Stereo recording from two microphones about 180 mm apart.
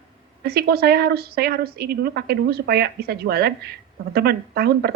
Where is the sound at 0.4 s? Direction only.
60° right (ahead or behind).